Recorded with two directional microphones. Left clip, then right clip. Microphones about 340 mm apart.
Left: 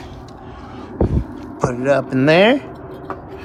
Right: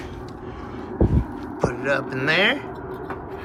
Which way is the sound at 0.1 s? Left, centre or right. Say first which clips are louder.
Even; centre.